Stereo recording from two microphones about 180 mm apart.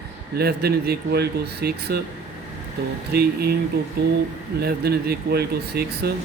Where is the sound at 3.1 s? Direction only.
60° right (ahead or behind).